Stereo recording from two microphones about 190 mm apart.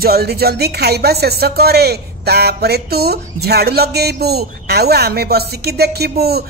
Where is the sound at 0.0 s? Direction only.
55° right (ahead or behind).